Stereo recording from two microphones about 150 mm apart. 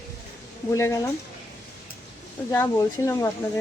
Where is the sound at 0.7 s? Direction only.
20° left (ahead or behind).